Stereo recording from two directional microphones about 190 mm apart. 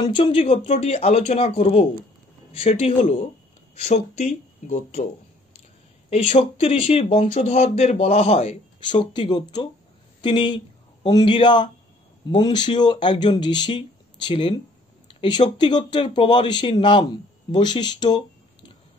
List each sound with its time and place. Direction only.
0.0 s speech: 25° left (ahead or behind)
6.0 s speech: 30° left (ahead or behind)